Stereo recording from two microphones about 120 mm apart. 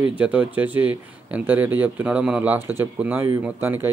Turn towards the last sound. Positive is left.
turn(degrees=-20)  # may be behind; listen again after turning